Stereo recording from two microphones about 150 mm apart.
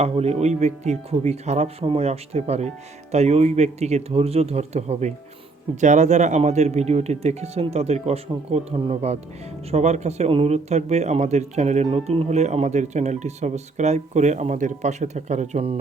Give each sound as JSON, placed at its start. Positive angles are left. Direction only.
{"t": 0.0, "sound": "speech", "side_deg": -45}